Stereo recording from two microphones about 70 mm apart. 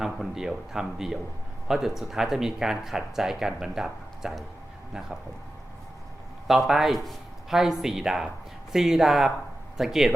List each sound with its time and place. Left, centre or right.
0.0 s speech: centre
6.5 s speech: centre